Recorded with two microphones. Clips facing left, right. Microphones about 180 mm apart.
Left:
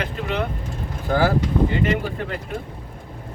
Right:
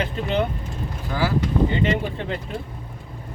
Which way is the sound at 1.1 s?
45° left (ahead or behind).